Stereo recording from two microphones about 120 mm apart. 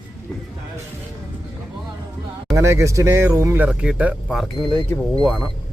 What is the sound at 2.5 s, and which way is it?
Speech, 20° right (ahead or behind).